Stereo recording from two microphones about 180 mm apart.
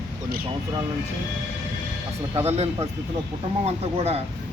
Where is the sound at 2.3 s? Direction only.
35° right (ahead or behind).